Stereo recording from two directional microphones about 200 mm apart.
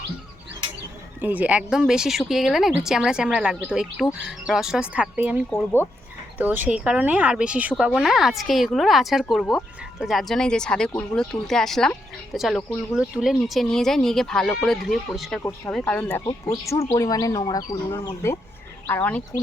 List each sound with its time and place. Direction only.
1.2 s speech: 10° right (ahead or behind); by 19.2 s 10° left (ahead or behind)